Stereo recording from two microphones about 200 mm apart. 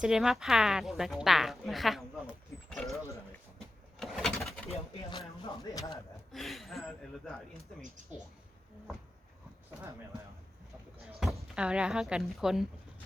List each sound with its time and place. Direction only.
0.0 s a woman's voice: 5° right (ahead or behind)
4.0 s bird: centre (ahead or behind)
5.4 s speech: 25° left (ahead or behind)
6.3 s a woman's voice: centre (ahead or behind)
11.0 s a sound: centre (ahead or behind)
11.5 s a woman's voice: 5° right (ahead or behind)